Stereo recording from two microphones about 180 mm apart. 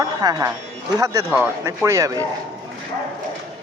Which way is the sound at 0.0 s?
20° right (ahead or behind).